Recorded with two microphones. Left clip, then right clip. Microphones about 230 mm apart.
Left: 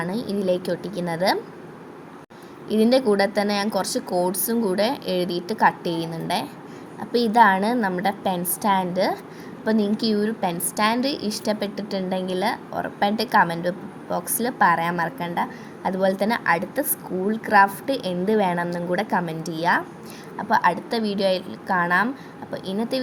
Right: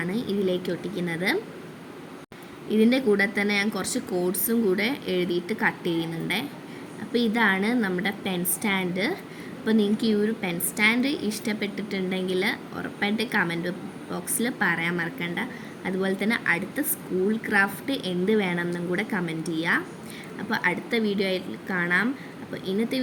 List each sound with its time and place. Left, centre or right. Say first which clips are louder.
0.0 s a woman's voice: left 2 dB; centre
2.6 s a woman's voice: left 3 dB; centre
7.7 s a woman's voice: left 3 dB; centre
8.0 s a woman's voice: left 5 dB; centre